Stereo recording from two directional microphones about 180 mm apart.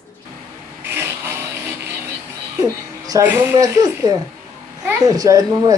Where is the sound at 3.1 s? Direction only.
10° right (ahead or behind).